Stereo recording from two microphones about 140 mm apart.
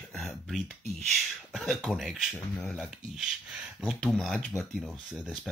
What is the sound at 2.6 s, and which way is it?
Speech, centre (ahead or behind).